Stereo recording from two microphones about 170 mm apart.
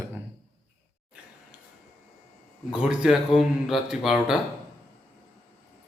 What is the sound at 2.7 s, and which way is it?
Speech, 5° right (ahead or behind).